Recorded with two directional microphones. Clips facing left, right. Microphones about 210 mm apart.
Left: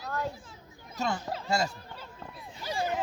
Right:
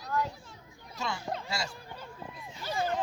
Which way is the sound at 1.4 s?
50° left (ahead or behind).